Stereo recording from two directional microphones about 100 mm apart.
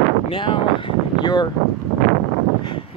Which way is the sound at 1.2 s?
45° left (ahead or behind).